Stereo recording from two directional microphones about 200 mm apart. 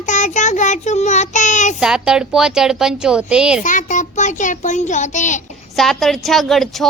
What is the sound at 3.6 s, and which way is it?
A child's voice, 40° left (ahead or behind).